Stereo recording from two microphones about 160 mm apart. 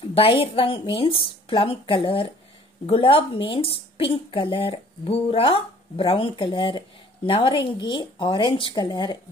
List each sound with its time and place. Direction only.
0.1 s a woman's voice: 35° left (ahead or behind)